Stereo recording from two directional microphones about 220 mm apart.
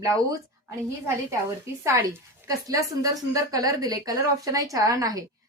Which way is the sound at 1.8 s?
10° right (ahead or behind).